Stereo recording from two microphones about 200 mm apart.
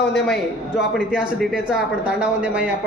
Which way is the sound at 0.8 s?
5° right (ahead or behind).